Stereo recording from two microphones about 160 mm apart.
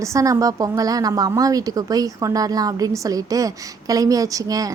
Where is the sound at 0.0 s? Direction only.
20° right (ahead or behind).